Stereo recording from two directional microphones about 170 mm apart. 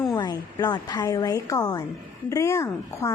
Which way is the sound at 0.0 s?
25° left (ahead or behind).